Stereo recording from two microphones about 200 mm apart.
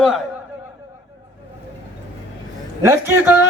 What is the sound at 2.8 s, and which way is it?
Speech, 10° right (ahead or behind).